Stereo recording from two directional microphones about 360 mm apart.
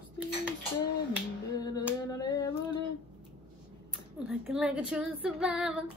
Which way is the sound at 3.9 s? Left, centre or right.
Centre.